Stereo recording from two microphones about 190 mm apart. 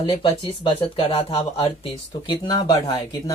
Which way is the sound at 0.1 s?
25° left (ahead or behind).